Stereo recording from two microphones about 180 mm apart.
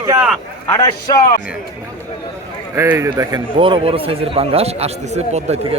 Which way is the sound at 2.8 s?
15° right (ahead or behind).